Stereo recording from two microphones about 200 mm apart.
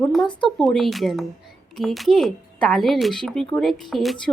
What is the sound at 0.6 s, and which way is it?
Speech, centre (ahead or behind).